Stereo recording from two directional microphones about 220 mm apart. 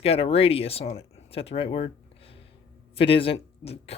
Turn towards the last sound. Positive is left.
turn(degrees=25)  # may be behind; listen again after turning